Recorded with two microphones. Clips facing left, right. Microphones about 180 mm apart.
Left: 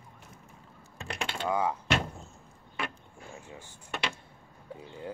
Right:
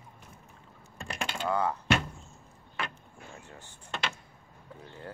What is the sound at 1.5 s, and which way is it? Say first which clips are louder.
Speech: even; 10° left (ahead or behind).